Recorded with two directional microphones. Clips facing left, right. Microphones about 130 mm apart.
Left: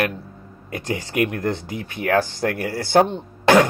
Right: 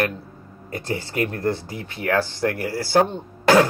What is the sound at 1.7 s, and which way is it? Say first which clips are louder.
Speech: left 2 dB; 20° left (ahead or behind).